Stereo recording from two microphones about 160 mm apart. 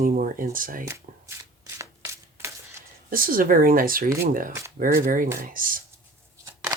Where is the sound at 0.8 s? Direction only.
15° right (ahead or behind).